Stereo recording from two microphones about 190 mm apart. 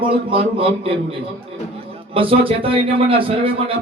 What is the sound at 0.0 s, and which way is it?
Speech, 30° right (ahead or behind).